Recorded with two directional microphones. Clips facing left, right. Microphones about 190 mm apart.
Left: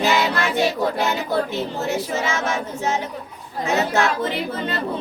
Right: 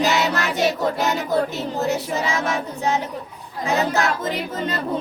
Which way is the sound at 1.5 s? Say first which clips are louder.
Right 1 dB; 35° right (ahead or behind).